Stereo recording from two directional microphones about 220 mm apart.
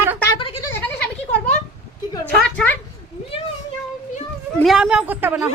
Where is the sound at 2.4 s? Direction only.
5° left (ahead or behind).